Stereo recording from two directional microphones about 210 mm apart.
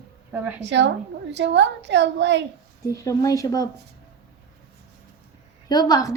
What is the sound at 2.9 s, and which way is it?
Speech, 15° left (ahead or behind).